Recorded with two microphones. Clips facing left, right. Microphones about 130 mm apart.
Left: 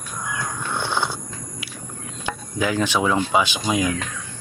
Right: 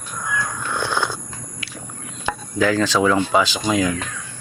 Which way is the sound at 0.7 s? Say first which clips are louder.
Right 1 dB; 15° left (ahead or behind).